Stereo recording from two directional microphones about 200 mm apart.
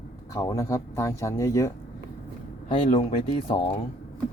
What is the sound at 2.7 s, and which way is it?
Speech, 30° left (ahead or behind).